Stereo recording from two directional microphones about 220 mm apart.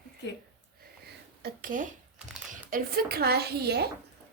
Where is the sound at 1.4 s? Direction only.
35° right (ahead or behind).